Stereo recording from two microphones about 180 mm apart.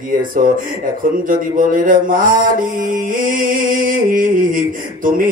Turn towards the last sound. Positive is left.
turn(degrees=-50)  # may be behind; listen again after turning